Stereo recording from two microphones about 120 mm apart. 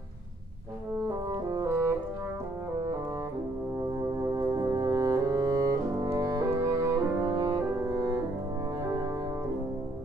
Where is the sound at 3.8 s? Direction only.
30° right (ahead or behind).